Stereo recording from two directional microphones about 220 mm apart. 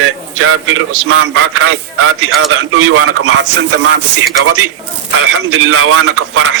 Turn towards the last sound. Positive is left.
turn(degrees=-75)  # may be behind; listen again after turning